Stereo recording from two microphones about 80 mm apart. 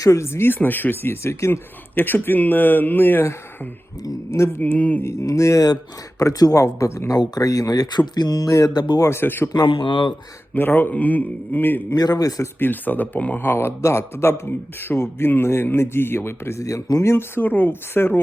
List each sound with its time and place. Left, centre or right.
0.0 s a man's voice: left
4.6 s a man's voice: centre
5.0 s speech: left
7.7 s speech: left
9.0 s a man's voice: left
9.6 s speech: left
10.5 s a man's voice: left
11.9 s speech: left
12.5 s a man's voice: left